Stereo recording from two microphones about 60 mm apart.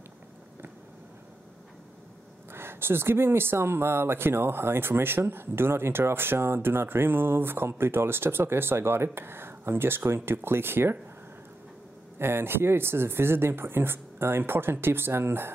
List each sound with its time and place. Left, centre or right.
2.5 s speech: right
12.2 s speech: right